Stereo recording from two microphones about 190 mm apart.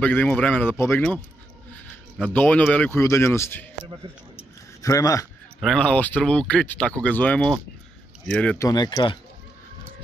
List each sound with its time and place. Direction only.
0.0 s speech: 10° left (ahead or behind)
4.4 s a sound: 15° left (ahead or behind)
5.6 s speech: 5° left (ahead or behind)
8.6 s speech: 20° left (ahead or behind)